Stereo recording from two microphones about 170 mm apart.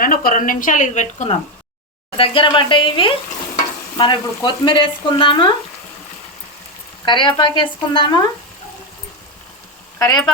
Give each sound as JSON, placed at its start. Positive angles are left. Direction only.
{"t": 0.0, "sound": "a woman's voice", "side_deg": 55}
{"t": 2.1, "sound": "speech", "side_deg": 30}
{"t": 7.0, "sound": "speech", "side_deg": 30}
{"t": 10.0, "sound": "speech", "side_deg": 25}